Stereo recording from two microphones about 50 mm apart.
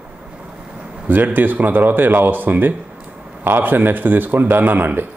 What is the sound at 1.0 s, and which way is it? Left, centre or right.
Speech, right.